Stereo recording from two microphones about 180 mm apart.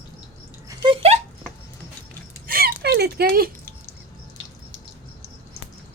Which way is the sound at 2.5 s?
55° right (ahead or behind).